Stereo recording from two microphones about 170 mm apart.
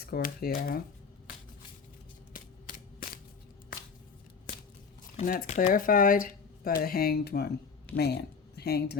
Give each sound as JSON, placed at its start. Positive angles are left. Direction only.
{"t": 0.0, "sound": "speech", "side_deg": 65}
{"t": 2.3, "sound": "a sound", "side_deg": 55}
{"t": 5.2, "sound": "speech", "side_deg": 55}